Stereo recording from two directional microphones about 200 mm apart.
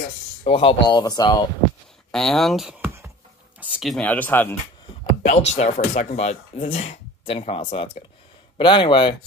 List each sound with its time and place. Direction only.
0.4 s speech: 30° left (ahead or behind)
2.0 s speech: 5° left (ahead or behind)
5.2 s speech: 35° left (ahead or behind)